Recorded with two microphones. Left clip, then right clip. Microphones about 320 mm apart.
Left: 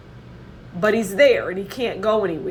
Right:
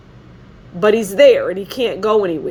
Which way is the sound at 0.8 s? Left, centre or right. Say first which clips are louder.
Right 5 dB; right.